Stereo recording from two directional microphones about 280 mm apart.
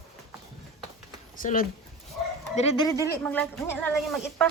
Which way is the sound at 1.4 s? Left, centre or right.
Left.